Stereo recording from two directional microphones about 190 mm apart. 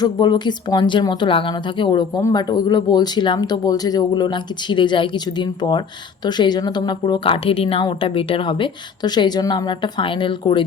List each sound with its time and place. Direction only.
0.0 s speech: 20° left (ahead or behind)